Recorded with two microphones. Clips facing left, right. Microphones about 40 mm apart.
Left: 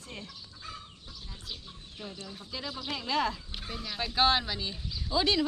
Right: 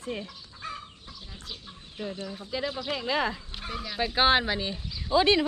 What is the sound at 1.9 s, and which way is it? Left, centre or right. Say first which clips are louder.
Speech: right 8 dB; right.